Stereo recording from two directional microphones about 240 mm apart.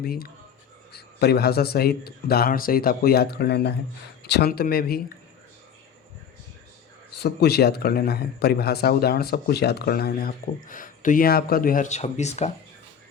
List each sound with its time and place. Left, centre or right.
0.0 s speech: left
7.2 s speech: left